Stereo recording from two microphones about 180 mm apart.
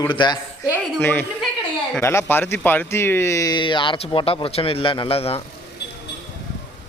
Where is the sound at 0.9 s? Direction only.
10° left (ahead or behind); by 5.4 s 35° left (ahead or behind).